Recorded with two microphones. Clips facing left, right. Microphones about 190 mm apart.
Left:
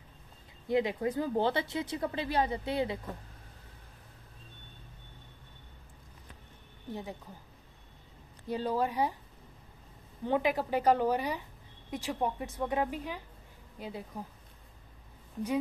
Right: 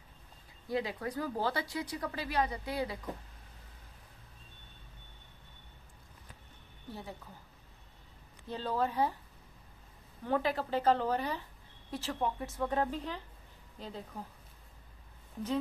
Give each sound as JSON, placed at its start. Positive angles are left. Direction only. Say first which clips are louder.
{"t": 0.7, "sound": "speech", "louder": "left 6 dB", "side_deg": 20}
{"t": 6.9, "sound": "a woman's voice", "louder": "left 5 dB", "side_deg": 20}
{"t": 8.5, "sound": "a woman's voice", "louder": "left 3 dB", "side_deg": 15}
{"t": 10.2, "sound": "a woman's voice", "louder": "left 3 dB", "side_deg": 15}